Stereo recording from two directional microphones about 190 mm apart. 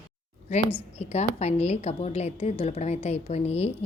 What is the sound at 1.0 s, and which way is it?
A woman's voice, 35° left (ahead or behind).